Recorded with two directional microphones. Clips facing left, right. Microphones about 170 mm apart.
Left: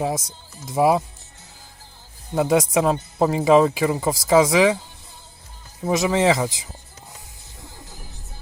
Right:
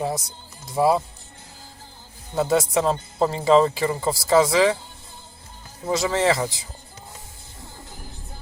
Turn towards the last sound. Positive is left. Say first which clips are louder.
# left 2 dB
turn(degrees=15)  # may be behind; listen again after turning